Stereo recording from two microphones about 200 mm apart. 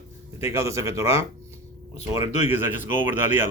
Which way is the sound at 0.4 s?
15° right (ahead or behind).